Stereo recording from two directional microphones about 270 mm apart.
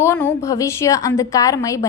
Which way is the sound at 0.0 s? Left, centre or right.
Centre.